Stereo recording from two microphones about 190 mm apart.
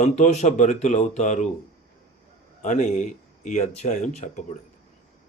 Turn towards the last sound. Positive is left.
turn(degrees=40)  # may be behind; listen again after turning